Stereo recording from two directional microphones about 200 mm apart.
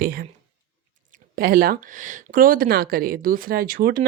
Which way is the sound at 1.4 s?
50° right (ahead or behind).